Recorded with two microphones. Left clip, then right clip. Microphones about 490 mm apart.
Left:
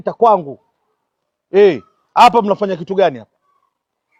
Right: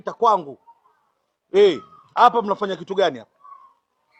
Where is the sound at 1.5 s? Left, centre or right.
Centre.